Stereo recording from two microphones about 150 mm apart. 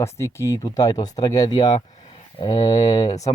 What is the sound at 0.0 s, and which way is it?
Speech, 20° left (ahead or behind).